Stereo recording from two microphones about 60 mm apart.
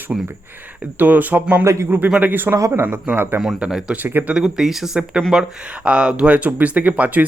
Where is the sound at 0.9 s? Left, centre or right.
Right.